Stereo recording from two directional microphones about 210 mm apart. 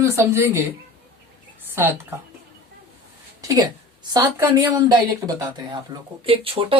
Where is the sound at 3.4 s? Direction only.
15° right (ahead or behind).